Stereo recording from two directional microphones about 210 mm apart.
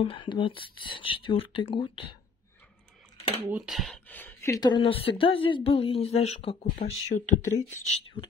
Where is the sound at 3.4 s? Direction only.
5° right (ahead or behind); by 7.0 s 40° left (ahead or behind).